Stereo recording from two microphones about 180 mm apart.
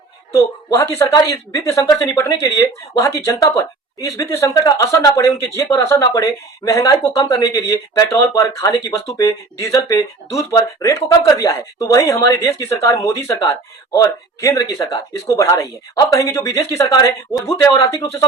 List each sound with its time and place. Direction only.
0.3 s speech: 15° left (ahead or behind)